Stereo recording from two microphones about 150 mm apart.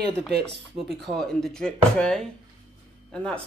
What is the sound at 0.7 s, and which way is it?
Speech, centre (ahead or behind).